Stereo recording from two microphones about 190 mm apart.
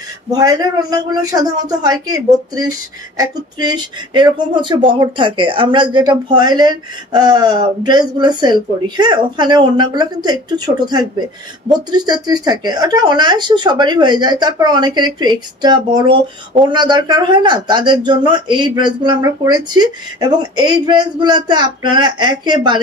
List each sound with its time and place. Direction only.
0.3 s speech: 20° right (ahead or behind)